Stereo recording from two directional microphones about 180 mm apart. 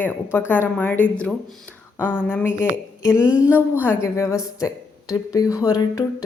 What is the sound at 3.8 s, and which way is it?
A woman's voice, 15° left (ahead or behind).